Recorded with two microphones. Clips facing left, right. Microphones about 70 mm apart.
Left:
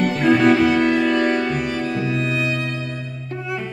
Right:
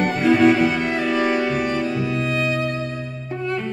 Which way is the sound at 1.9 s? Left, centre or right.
Left.